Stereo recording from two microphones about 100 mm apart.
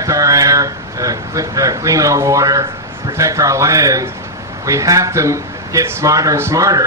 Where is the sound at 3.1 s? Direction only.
30° right (ahead or behind).